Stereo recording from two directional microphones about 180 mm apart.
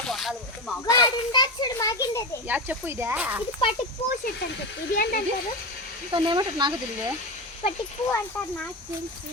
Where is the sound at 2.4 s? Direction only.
10° right (ahead or behind).